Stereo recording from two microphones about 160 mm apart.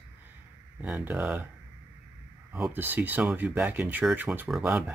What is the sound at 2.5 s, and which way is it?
Speech, 10° right (ahead or behind).